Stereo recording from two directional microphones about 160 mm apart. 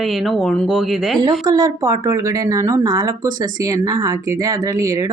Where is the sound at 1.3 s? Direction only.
25° right (ahead or behind).